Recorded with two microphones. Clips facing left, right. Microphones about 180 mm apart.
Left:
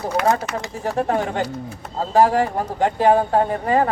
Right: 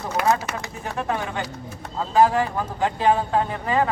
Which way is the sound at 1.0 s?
45° left (ahead or behind).